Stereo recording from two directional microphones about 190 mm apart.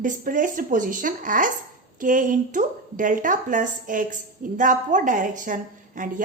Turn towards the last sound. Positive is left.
turn(degrees=-45)  # may be behind; listen again after turning